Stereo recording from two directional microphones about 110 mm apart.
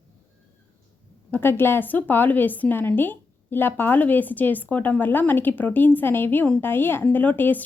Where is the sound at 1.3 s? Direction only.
20° left (ahead or behind).